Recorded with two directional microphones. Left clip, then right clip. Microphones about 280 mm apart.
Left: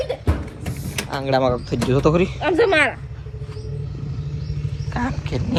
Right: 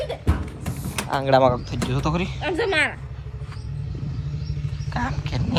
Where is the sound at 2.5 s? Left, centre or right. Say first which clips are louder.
Left 5 dB; centre.